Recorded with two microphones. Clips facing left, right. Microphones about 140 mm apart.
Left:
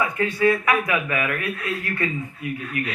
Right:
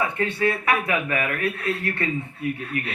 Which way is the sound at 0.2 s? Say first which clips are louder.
Left 3 dB; 30° right (ahead or behind).